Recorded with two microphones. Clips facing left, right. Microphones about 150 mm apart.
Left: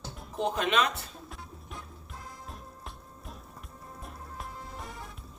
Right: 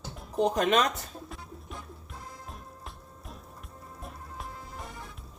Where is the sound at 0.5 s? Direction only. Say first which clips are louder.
Right 1 dB; 40° right (ahead or behind).